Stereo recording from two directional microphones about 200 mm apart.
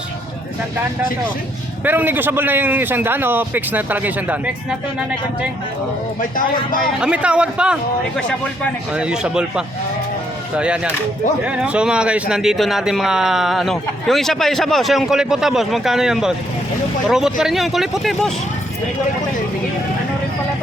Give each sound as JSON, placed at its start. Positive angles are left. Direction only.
{"t": 1.8, "sound": "a man's voice", "side_deg": -10}
{"t": 6.3, "sound": "a man's voice", "side_deg": 45}
{"t": 7.0, "sound": "speech", "side_deg": -5}